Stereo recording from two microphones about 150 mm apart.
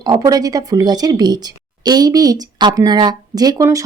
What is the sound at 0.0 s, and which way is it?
Speech, 25° right (ahead or behind).